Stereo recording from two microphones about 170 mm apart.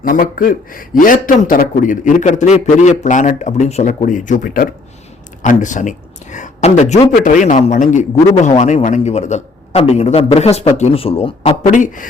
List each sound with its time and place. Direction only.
0.0 s speech: 55° left (ahead or behind); by 11.5 s 35° left (ahead or behind)
11.6 s speech: 50° left (ahead or behind)